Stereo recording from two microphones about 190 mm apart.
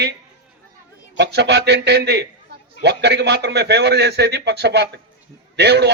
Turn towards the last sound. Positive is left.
turn(degrees=-60)  # may be behind; listen again after turning